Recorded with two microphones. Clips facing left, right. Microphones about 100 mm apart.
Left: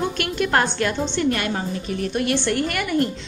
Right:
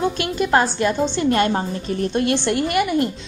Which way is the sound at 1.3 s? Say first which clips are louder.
Right 5 dB; 30° right (ahead or behind).